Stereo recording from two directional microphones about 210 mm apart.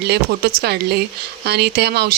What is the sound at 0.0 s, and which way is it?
Speech, 50° right (ahead or behind).